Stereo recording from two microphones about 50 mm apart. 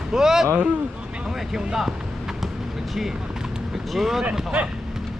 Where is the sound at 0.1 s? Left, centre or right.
Centre.